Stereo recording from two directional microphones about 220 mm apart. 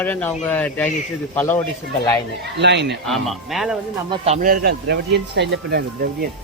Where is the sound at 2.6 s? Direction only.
50° right (ahead or behind).